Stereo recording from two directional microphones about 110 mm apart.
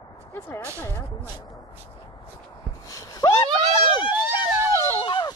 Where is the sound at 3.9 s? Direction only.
45° left (ahead or behind).